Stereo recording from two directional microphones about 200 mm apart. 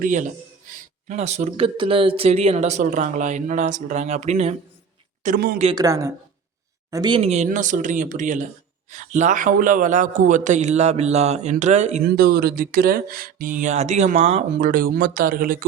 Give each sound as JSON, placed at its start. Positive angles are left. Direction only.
{"t": 0.0, "sound": "speech", "side_deg": -40}
{"t": 5.7, "sound": "speech", "side_deg": -15}
{"t": 12.0, "sound": "speech", "side_deg": -50}